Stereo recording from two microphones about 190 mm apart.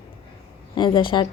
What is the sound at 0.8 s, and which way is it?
Speech, 25° left (ahead or behind).